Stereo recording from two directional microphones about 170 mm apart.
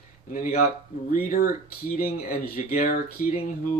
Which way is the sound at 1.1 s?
60° left (ahead or behind).